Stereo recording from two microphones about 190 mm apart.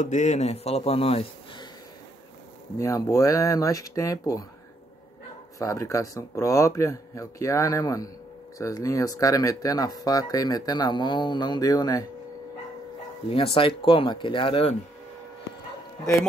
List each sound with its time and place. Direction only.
0.0 s speech: 40° left (ahead or behind)
2.8 s speech: 15° left (ahead or behind)
5.6 s speech: 15° left (ahead or behind)
13.3 s speech: 30° left (ahead or behind)